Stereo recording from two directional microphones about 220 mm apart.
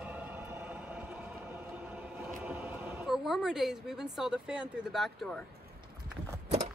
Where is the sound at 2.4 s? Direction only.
5° right (ahead or behind).